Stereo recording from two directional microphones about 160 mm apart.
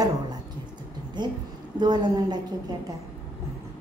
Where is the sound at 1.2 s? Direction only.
25° right (ahead or behind).